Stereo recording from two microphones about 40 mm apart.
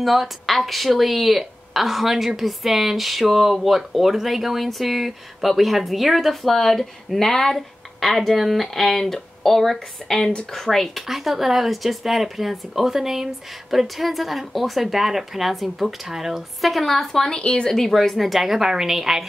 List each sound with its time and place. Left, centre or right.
0.0 s a woman's voice: centre
11.1 s a woman's voice: centre
16.6 s a woman's voice: centre
17.4 s speech: left
17.6 s a woman's voice: centre